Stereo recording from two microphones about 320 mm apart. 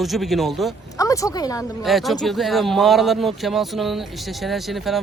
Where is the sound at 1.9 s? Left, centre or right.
Centre.